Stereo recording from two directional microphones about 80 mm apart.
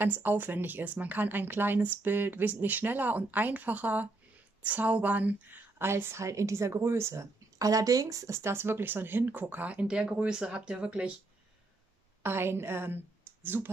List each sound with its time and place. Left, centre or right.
0.0 s a woman's voice: right
12.2 s a woman's voice: right